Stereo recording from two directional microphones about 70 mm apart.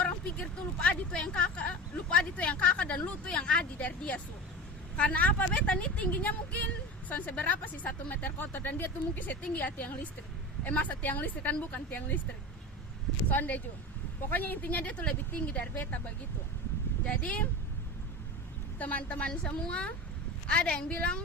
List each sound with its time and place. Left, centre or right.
0.0 s speech: centre
13.2 s speech: left
18.8 s speech: left